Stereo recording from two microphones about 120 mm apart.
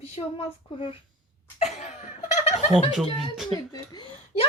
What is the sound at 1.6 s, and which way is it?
Laughter, 70° left (ahead or behind).